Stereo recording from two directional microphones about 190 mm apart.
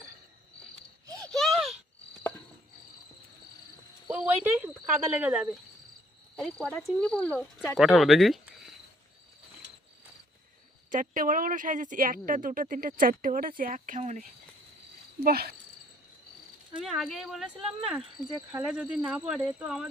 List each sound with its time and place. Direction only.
1.3 s a sound: centre (ahead or behind)
4.1 s speech: 10° right (ahead or behind)
10.9 s speech: 45° right (ahead or behind)
15.2 s speech: 55° right (ahead or behind)
16.7 s speech: centre (ahead or behind)